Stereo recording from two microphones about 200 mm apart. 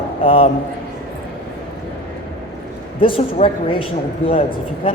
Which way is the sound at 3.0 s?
25° left (ahead or behind).